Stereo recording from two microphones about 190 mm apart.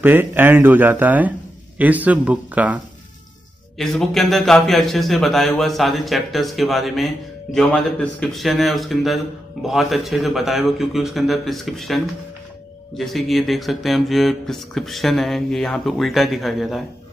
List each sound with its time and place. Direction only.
0.0 s a man's voice: 10° right (ahead or behind)